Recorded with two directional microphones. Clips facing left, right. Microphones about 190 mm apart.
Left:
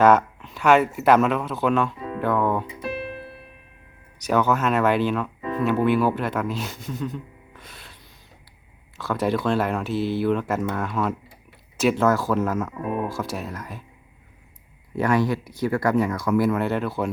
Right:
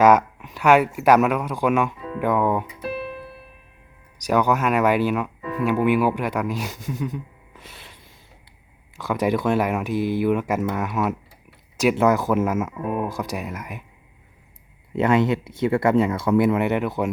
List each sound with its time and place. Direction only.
0.0 s speech: 10° right (ahead or behind)
4.3 s speech: 10° right (ahead or behind)
9.0 s speech: 15° right (ahead or behind)
14.9 s speech: 20° right (ahead or behind)